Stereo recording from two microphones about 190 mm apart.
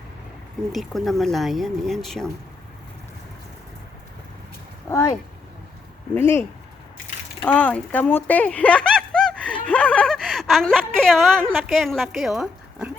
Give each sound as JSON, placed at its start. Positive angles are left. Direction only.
{"t": 0.7, "sound": "speech", "side_deg": 0}
{"t": 4.9, "sound": "speech", "side_deg": 15}
{"t": 6.1, "sound": "speech", "side_deg": 10}
{"t": 7.4, "sound": "a woman's voice", "side_deg": 10}